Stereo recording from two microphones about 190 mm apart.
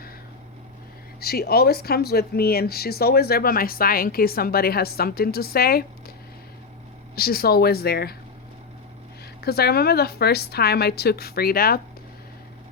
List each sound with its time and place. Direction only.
1.2 s speech: 55° left (ahead or behind)
7.2 s a woman's voice: 55° left (ahead or behind)
9.4 s a woman's voice: 55° left (ahead or behind)